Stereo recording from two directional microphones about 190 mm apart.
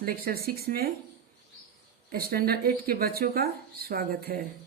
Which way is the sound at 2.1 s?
55° right (ahead or behind).